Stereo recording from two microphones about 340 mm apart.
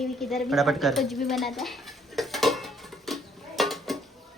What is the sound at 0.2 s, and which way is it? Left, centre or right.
Speech, centre.